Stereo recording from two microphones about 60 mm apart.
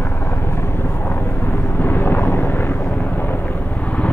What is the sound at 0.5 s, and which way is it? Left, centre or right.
Vehicle, left.